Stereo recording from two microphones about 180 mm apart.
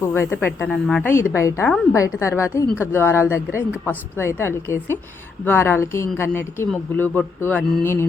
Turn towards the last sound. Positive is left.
turn(degrees=10)  # may be behind; listen again after turning